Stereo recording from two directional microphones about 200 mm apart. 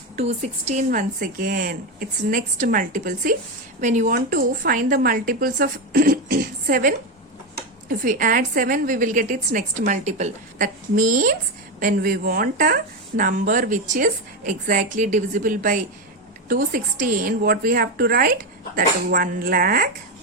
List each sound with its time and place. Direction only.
0.2 s speech: 35° right (ahead or behind)